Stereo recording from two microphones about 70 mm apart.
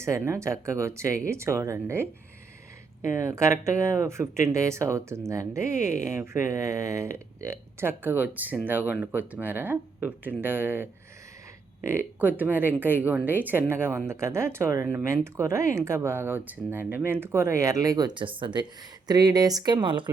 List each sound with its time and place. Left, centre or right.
0.0 s speech: right
12.2 s speech: right
19.0 s speech: right